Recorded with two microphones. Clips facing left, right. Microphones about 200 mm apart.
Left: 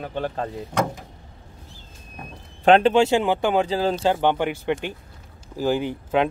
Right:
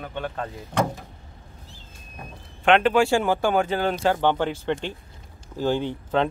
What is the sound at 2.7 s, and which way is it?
Speech, 30° left (ahead or behind).